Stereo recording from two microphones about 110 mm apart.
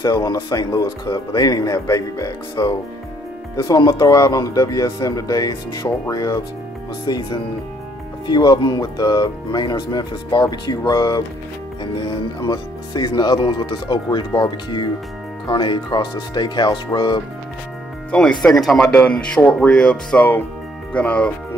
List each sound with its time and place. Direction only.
0.0 s speech: 35° left (ahead or behind)
12.4 s speech: 40° left (ahead or behind)
18.1 s speech: 5° left (ahead or behind)